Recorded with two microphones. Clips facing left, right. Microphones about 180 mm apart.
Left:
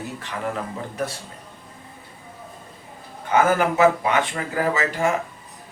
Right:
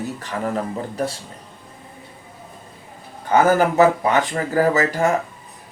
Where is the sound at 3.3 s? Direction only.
40° right (ahead or behind).